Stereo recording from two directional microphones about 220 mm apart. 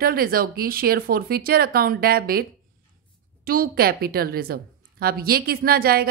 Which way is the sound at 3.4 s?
45° right (ahead or behind).